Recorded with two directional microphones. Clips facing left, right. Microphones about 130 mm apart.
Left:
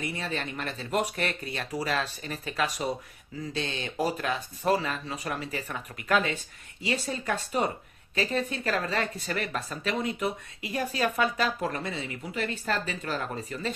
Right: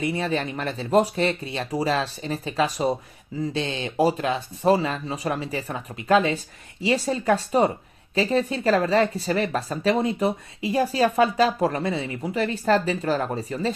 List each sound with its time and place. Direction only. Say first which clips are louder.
0.1 s speech: right 8 dB; 30° right (ahead or behind)